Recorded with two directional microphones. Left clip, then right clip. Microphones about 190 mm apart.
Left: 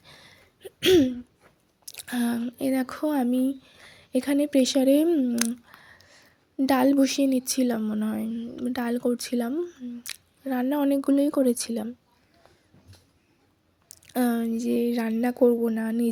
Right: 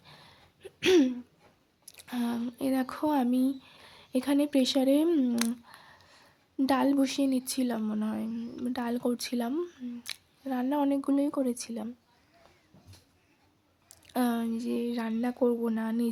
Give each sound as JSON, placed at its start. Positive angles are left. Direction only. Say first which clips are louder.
{"t": 0.0, "sound": "a sound", "louder": "left 3 dB", "side_deg": 15}
{"t": 1.8, "sound": "a sound", "louder": "left 6 dB", "side_deg": 20}
{"t": 2.4, "sound": "speech", "louder": "left 4 dB", "side_deg": 10}
{"t": 5.0, "sound": "speech", "louder": "left 3 dB", "side_deg": 0}
{"t": 5.6, "sound": "speech", "louder": "left 2 dB", "side_deg": 10}
{"t": 8.4, "sound": "speech", "louder": "left 4 dB", "side_deg": 5}
{"t": 13.8, "sound": "speech", "louder": "left 4 dB", "side_deg": 10}